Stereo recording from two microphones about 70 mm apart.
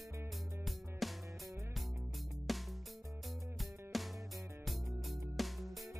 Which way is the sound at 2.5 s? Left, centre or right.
Centre.